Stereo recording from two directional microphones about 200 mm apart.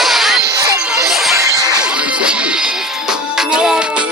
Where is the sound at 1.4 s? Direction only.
15° right (ahead or behind).